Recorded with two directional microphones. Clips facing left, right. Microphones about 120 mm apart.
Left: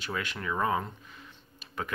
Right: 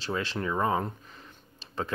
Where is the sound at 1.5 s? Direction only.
30° right (ahead or behind).